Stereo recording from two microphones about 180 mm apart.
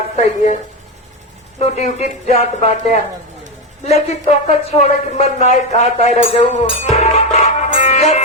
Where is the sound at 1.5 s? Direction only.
35° left (ahead or behind).